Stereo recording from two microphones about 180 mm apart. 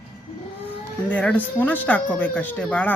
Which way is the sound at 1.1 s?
10° left (ahead or behind).